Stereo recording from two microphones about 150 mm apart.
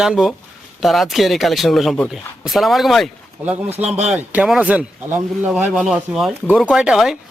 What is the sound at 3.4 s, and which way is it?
Speech, 10° right (ahead or behind).